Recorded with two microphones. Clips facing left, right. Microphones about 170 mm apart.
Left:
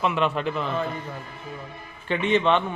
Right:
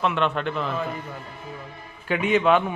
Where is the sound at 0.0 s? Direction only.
5° left (ahead or behind).